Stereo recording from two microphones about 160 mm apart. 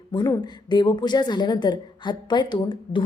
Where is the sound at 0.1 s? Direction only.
25° left (ahead or behind).